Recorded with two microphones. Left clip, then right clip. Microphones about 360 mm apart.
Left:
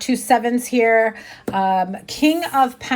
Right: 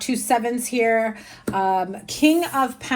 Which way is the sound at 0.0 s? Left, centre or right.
Left.